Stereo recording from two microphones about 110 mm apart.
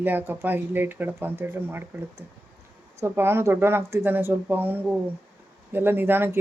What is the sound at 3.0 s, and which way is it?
Speech, 20° right (ahead or behind).